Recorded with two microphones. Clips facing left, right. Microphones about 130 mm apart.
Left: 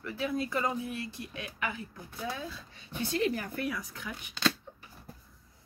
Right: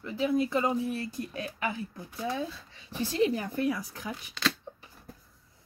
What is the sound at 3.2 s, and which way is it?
Speech, 25° right (ahead or behind).